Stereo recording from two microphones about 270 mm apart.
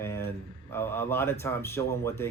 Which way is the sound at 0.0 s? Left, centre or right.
Centre.